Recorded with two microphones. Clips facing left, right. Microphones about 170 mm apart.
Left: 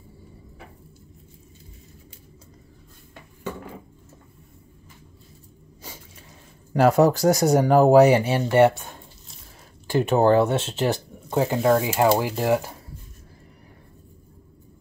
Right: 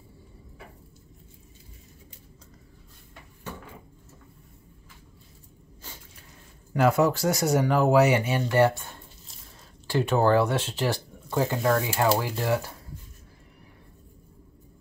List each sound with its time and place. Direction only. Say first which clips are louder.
6.7 s speech: left 5 dB; 40° left (ahead or behind)
8.4 s speech: left 4 dB; 25° left (ahead or behind)
9.8 s speech: left 4 dB; 20° left (ahead or behind)